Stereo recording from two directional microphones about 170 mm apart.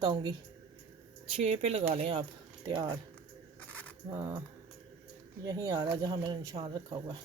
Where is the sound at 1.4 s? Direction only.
40° right (ahead or behind).